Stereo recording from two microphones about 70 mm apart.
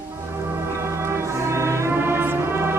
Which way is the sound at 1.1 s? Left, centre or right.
Right.